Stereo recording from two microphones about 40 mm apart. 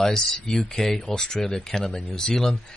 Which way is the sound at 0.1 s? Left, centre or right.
Centre.